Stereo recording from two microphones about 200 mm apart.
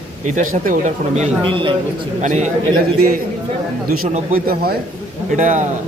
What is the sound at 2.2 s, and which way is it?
Speech, 40° right (ahead or behind).